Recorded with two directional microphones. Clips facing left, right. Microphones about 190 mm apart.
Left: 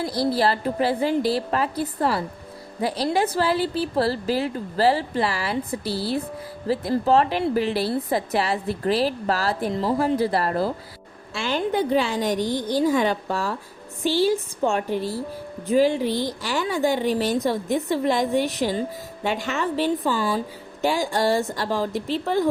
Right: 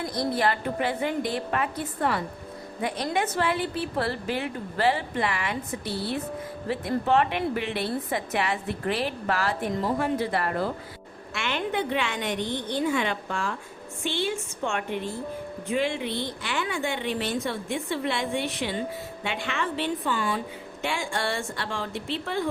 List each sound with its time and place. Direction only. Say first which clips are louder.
0.0 s a woman's voice: left 4 dB; 35° left (ahead or behind)